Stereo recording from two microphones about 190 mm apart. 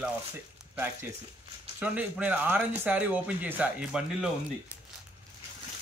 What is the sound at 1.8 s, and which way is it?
Speech, 5° right (ahead or behind).